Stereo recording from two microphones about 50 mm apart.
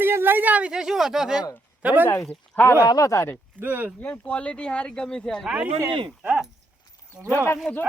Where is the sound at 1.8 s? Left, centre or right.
Right.